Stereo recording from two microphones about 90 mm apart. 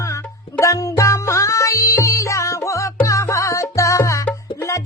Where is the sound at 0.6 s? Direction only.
35° left (ahead or behind).